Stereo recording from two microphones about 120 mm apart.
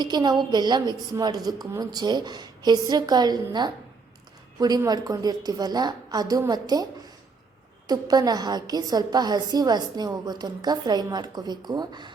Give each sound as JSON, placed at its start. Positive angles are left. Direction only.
{"t": 0.0, "sound": "a woman's voice", "side_deg": -35}
{"t": 4.9, "sound": "a woman's voice", "side_deg": -30}
{"t": 7.9, "sound": "a woman's voice", "side_deg": -30}